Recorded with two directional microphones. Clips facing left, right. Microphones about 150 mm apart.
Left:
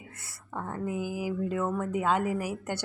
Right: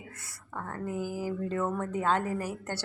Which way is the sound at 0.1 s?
25° left (ahead or behind).